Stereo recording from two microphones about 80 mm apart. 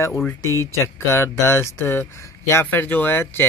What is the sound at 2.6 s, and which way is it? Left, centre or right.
Speech, left.